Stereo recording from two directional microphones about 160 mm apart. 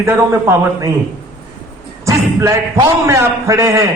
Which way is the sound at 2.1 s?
20° right (ahead or behind).